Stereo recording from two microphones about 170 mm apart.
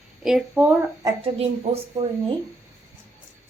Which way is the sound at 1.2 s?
35° right (ahead or behind).